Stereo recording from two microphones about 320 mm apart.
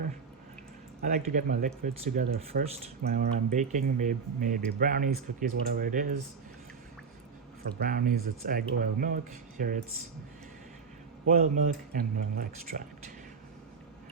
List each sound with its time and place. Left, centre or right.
1.0 s speech: right
7.8 s speech: right
11.5 s speech: right